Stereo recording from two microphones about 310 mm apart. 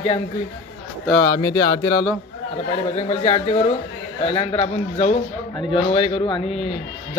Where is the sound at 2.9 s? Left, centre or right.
Left.